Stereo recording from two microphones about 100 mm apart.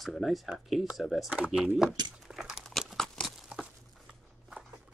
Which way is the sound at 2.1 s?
5° right (ahead or behind).